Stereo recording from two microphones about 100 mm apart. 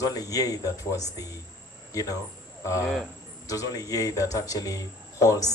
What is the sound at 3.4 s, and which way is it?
Speech, 35° left (ahead or behind).